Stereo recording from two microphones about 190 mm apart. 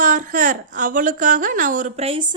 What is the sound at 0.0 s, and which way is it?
A woman's voice, 45° right (ahead or behind).